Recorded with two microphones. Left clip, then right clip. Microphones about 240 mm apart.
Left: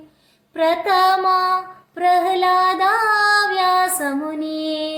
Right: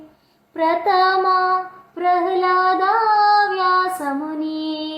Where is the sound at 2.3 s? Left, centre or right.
Left.